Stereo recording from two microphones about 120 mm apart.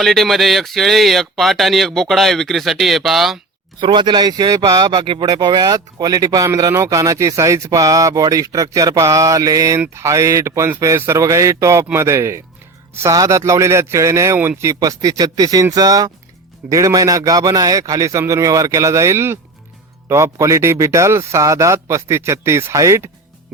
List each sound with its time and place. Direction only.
0.0 s speech: centre (ahead or behind)
3.8 s speech: 40° right (ahead or behind)